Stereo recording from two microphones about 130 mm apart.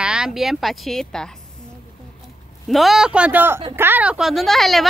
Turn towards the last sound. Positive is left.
turn(degrees=0)  # may be behind; listen again after turning